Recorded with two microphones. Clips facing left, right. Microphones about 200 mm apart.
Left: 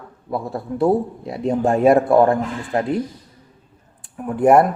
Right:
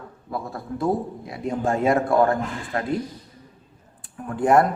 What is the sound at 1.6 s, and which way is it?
Speech, 20° left (ahead or behind).